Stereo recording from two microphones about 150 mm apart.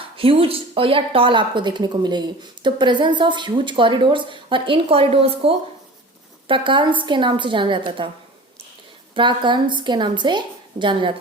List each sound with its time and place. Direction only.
0.2 s speech: 40° right (ahead or behind)
9.1 s speech: 30° right (ahead or behind)